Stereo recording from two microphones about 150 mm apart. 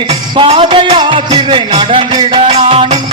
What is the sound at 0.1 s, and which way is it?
Music, 40° right (ahead or behind).